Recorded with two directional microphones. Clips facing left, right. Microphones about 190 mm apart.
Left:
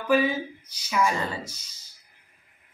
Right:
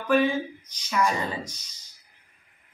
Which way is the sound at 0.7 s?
5° left (ahead or behind).